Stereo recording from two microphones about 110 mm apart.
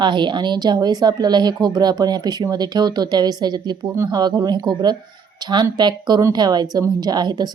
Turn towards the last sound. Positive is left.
turn(degrees=-40)  # may be behind; listen again after turning